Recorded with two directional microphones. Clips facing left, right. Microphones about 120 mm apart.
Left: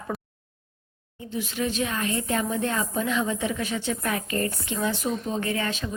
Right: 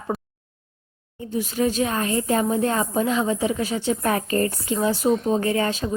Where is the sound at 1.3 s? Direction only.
40° right (ahead or behind).